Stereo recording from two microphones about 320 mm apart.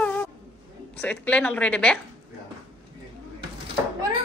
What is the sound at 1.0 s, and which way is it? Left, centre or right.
Speech, centre.